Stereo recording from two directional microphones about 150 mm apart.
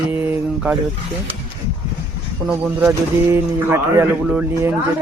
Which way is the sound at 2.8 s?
15° right (ahead or behind).